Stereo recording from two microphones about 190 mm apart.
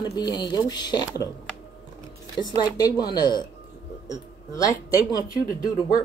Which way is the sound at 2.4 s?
20° left (ahead or behind).